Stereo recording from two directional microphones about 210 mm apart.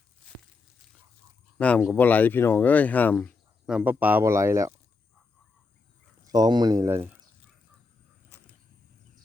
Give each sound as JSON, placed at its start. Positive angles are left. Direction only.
{"t": 1.5, "sound": "speech", "side_deg": 5}
{"t": 3.7, "sound": "speech", "side_deg": -5}
{"t": 6.2, "sound": "speech", "side_deg": -20}